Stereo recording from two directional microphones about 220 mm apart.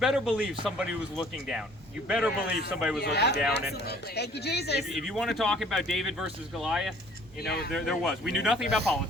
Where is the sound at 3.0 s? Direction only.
50° left (ahead or behind).